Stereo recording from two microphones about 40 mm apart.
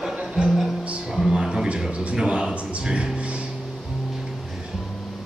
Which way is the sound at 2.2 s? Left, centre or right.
Right.